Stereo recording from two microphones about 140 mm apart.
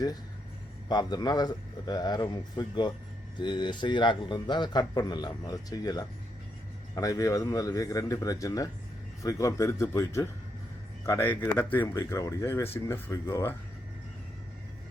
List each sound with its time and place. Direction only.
0.9 s a man's voice: 30° left (ahead or behind)